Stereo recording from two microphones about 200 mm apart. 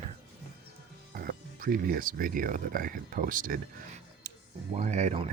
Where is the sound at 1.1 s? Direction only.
45° right (ahead or behind).